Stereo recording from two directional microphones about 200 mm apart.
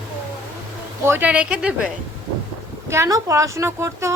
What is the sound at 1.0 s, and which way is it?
Speech, 10° right (ahead or behind).